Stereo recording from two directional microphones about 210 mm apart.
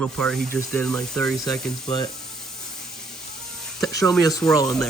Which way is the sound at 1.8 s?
20° left (ahead or behind).